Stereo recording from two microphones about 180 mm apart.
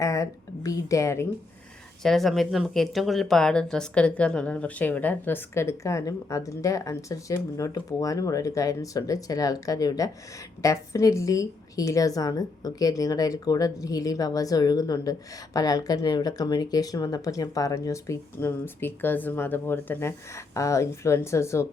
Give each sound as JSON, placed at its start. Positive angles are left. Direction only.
{"t": 0.0, "sound": "a woman's voice", "side_deg": 20}
{"t": 2.0, "sound": "a woman's voice", "side_deg": 0}